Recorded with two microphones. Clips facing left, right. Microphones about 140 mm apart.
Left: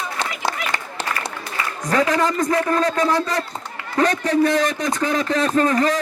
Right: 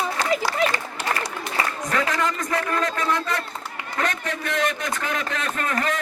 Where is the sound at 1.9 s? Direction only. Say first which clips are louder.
Left 8 dB; 35° left (ahead or behind).